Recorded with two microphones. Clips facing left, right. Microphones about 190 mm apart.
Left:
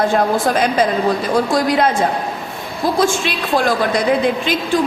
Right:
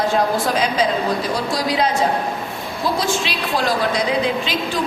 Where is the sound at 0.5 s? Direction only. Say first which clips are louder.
Left 3 dB; 50° left (ahead or behind).